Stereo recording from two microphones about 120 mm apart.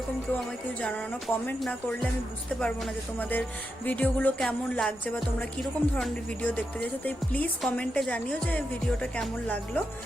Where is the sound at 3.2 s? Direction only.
15° left (ahead or behind).